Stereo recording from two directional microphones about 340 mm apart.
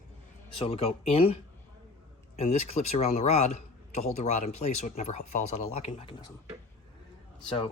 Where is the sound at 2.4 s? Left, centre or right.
Centre.